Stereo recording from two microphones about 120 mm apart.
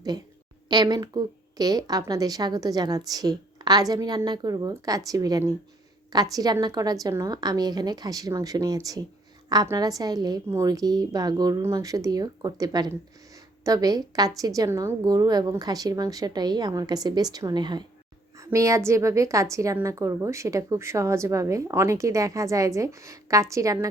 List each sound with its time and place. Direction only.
0.7 s a woman's voice: 35° right (ahead or behind)
18.3 s a woman's voice: 25° right (ahead or behind)